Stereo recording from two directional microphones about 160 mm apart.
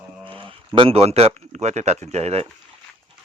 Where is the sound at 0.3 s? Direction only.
35° right (ahead or behind).